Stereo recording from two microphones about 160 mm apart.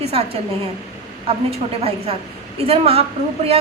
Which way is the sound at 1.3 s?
40° right (ahead or behind).